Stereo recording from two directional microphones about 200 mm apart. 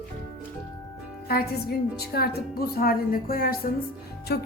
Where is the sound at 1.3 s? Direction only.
50° left (ahead or behind).